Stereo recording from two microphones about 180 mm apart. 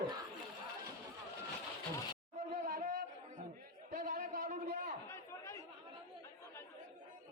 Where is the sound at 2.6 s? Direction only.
50° right (ahead or behind).